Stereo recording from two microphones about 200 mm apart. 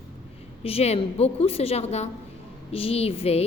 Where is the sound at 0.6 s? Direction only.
30° left (ahead or behind).